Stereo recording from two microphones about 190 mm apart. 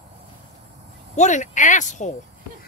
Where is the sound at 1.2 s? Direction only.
40° left (ahead or behind).